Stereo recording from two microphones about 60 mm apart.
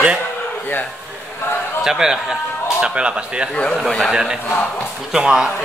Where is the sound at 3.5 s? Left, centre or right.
Centre.